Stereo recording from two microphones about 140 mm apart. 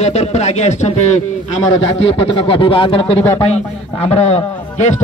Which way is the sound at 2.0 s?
45° left (ahead or behind).